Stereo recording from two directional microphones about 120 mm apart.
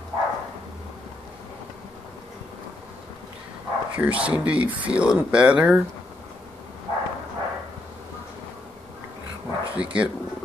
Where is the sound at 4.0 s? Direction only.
10° right (ahead or behind).